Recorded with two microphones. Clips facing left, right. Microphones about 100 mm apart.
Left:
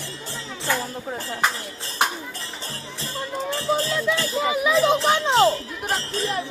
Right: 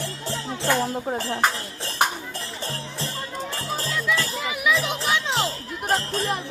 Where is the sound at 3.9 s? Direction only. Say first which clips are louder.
Left 2 dB; 25° left (ahead or behind).